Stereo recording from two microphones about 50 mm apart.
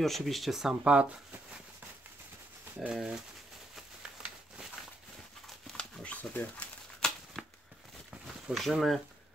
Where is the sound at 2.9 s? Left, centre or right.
Centre.